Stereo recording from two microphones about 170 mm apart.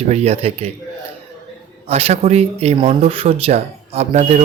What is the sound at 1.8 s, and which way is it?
Speech, 40° right (ahead or behind).